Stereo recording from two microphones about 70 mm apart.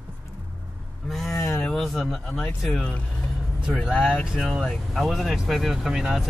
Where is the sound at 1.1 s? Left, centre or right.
Centre.